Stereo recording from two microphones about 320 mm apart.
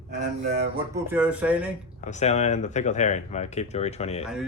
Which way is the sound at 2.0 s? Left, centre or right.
Left.